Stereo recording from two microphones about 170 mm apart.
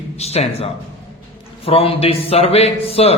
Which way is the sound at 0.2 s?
40° left (ahead or behind).